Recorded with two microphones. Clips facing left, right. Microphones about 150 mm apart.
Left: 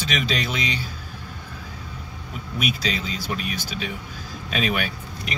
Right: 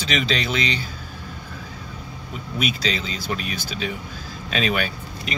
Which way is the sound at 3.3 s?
5° left (ahead or behind).